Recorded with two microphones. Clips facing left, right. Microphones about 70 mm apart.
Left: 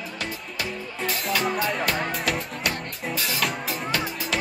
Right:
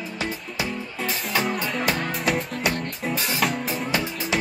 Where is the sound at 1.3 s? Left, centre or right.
Centre.